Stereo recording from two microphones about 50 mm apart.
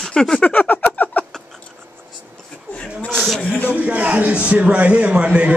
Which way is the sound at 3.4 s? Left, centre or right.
Left.